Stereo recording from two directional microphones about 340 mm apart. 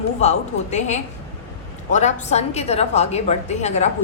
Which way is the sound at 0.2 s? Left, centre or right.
Centre.